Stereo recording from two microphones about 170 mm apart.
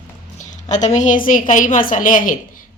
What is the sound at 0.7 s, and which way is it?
A woman's voice, 45° left (ahead or behind).